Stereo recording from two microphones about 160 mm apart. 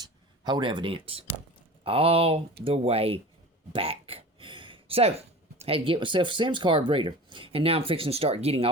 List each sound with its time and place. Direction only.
0.0 s speech: 25° right (ahead or behind)